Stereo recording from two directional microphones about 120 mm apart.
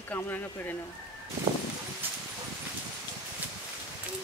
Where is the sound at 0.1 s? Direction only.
15° left (ahead or behind).